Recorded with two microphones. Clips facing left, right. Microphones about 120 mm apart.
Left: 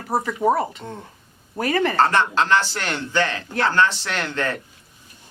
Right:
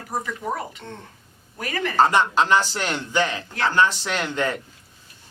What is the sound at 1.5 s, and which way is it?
Speech, 35° left (ahead or behind).